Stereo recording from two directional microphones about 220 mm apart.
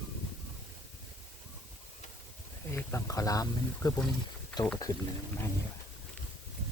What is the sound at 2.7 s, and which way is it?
Speech, 10° left (ahead or behind).